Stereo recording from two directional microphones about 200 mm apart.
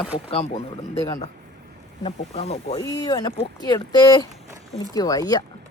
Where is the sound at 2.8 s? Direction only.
20° left (ahead or behind).